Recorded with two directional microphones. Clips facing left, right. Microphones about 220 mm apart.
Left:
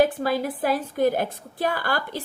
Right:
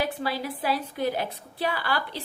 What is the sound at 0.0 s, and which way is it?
A woman's voice, 50° left (ahead or behind).